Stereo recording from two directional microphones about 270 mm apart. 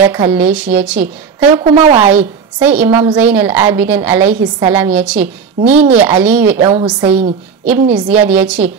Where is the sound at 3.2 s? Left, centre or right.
Centre.